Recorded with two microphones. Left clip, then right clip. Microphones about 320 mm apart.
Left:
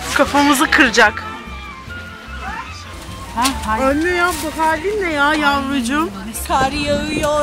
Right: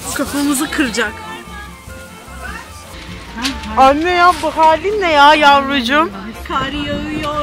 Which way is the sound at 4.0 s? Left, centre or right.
Centre.